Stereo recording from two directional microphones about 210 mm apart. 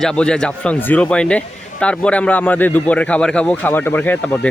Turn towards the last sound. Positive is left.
turn(degrees=5)  # may be behind; listen again after turning